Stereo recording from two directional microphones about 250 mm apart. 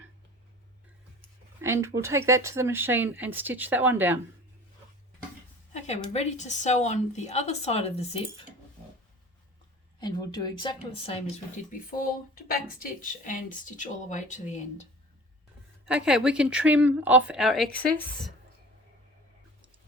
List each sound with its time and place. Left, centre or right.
1.6 s speech: centre
5.7 s a woman's voice: left
10.0 s speech: centre
11.9 s a woman's voice: left
15.9 s a woman's voice: centre